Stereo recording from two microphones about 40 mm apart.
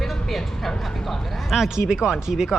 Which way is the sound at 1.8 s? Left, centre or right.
Centre.